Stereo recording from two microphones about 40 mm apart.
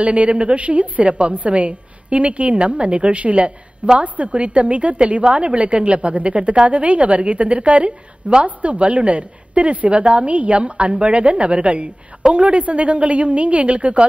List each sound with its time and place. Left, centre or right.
0.0 s a woman's voice: right